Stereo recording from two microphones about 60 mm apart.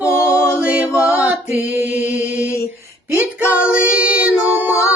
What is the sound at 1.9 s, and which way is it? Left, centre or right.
Chant, right.